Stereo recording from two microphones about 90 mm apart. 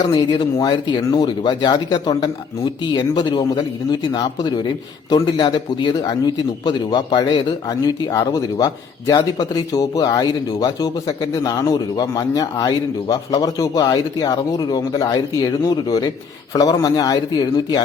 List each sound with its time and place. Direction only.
0.1 s a man's voice: 50° left (ahead or behind)
0.7 s a man's voice: 60° left (ahead or behind); by 17.7 s 45° left (ahead or behind)